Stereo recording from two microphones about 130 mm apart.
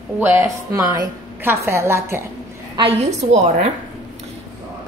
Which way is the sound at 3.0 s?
60° right (ahead or behind).